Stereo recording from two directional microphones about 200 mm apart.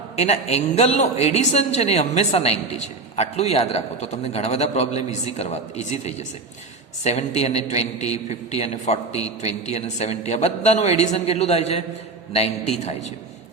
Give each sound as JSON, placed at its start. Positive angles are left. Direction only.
{"t": 0.2, "sound": "speech", "side_deg": 30}